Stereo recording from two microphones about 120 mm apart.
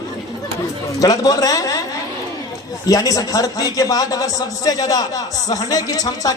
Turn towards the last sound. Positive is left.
turn(degrees=30)  # may be behind; listen again after turning